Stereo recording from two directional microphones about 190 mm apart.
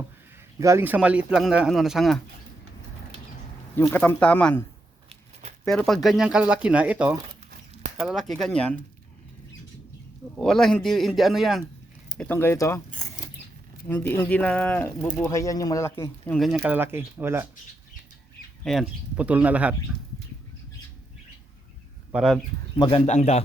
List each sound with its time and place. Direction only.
0.6 s speech: 15° right (ahead or behind)
3.8 s speech: 10° left (ahead or behind)
5.0 s a sound: 35° right (ahead or behind)
5.6 s speech: centre (ahead or behind)
10.3 s speech: 5° left (ahead or behind)
16.6 s speech: 10° right (ahead or behind)
18.6 s speech: centre (ahead or behind)
22.1 s speech: centre (ahead or behind)
22.8 s speech: 25° left (ahead or behind)
23.0 s speech: 35° left (ahead or behind)